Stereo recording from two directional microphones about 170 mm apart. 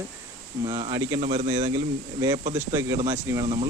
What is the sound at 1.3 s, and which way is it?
Speech, 30° right (ahead or behind).